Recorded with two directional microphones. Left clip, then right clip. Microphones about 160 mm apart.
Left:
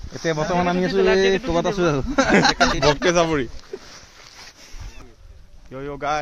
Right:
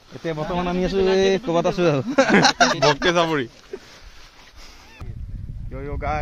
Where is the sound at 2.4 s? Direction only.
90° right.